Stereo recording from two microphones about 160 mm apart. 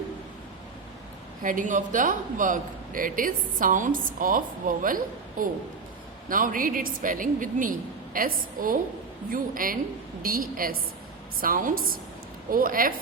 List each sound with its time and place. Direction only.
1.4 s a man's voice: 55° right (ahead or behind)